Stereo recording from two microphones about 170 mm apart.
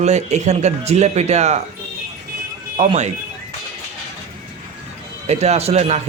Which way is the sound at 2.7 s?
40° right (ahead or behind).